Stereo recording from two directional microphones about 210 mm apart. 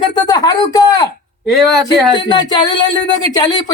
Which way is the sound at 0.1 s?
20° left (ahead or behind).